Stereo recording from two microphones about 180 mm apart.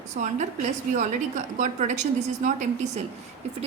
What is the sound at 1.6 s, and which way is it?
A woman's voice, 40° right (ahead or behind).